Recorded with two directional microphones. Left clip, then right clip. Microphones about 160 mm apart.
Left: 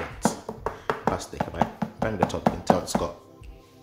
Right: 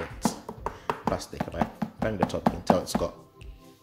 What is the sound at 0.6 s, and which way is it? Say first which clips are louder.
Speech: left 3 dB; 20° right (ahead or behind).